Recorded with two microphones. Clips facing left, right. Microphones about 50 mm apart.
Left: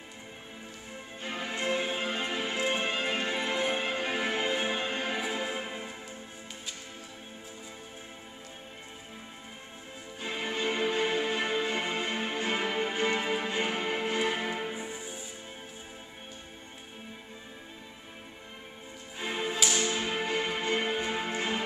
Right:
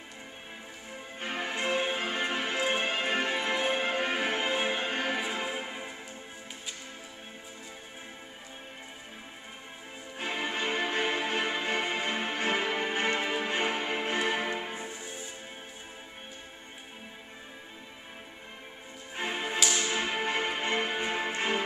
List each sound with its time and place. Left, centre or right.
1.2 s music: right
1.6 s music: right
5.5 s music: centre
10.1 s music: right
12.5 s music: right
14.2 s music: right
19.2 s music: right
19.6 s music: centre
20.2 s music: right